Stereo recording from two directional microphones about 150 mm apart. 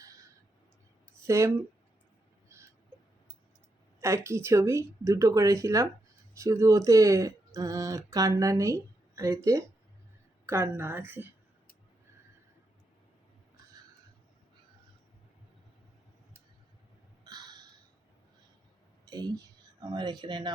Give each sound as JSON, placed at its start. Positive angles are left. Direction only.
{"t": 1.3, "sound": "speech", "side_deg": -20}
{"t": 2.5, "sound": "a sound", "side_deg": -20}
{"t": 4.0, "sound": "a woman's voice", "side_deg": -20}
{"t": 17.2, "sound": "crow", "side_deg": -30}
{"t": 19.9, "sound": "speech", "side_deg": -30}